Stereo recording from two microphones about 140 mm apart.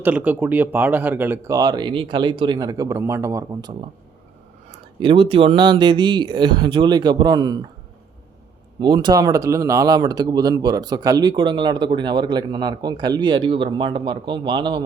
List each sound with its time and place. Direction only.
0.0 s speech: 10° right (ahead or behind)
1.5 s speech: 30° right (ahead or behind)
8.8 s speech: 35° right (ahead or behind)